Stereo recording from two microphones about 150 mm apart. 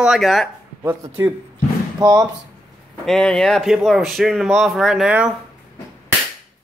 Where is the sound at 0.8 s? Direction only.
15° right (ahead or behind).